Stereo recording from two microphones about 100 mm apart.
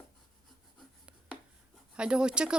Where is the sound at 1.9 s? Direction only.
10° right (ahead or behind).